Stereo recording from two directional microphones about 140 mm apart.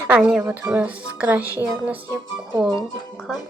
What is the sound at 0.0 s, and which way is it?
Speech, 5° right (ahead or behind).